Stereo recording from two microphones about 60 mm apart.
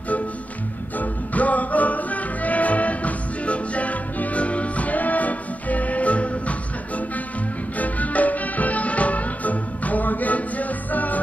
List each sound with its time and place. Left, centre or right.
0.9 s music: left
7.8 s music: left